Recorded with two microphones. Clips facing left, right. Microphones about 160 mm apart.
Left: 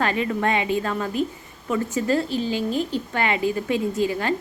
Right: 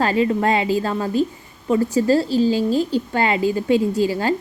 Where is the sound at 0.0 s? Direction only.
30° right (ahead or behind).